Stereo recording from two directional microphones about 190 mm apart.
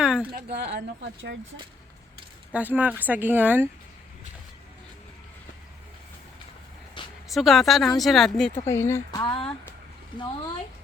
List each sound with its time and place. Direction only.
0.0 s a sound: 5° right (ahead or behind)
0.3 s speech: 55° right (ahead or behind)
2.5 s speech: 10° right (ahead or behind)
7.0 s a sound: 25° left (ahead or behind)
7.3 s speech: centre (ahead or behind)
9.2 s speech: 25° left (ahead or behind)